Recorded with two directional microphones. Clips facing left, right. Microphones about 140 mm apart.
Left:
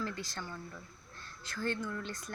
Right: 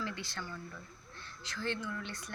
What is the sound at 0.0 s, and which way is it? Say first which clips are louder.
Speech: left 1 dB; 45° left (ahead or behind).